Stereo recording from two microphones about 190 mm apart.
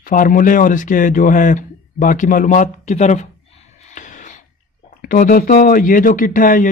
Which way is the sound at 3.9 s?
40° left (ahead or behind).